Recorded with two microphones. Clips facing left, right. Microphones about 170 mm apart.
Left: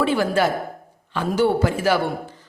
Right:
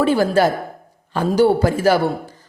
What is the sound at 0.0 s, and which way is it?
A woman's voice, 40° right (ahead or behind).